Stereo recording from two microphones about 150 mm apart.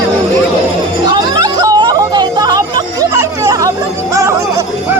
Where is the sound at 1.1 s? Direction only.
25° right (ahead or behind).